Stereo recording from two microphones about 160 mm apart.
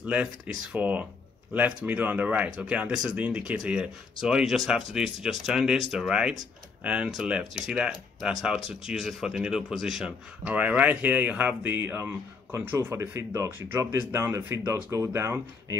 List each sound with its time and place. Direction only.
0.0 s speech: 10° right (ahead or behind)